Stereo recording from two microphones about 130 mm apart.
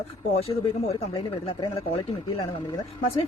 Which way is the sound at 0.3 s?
50° left (ahead or behind).